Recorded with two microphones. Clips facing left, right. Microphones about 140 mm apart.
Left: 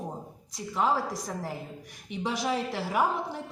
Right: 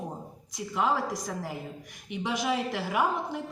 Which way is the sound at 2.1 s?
35° left (ahead or behind).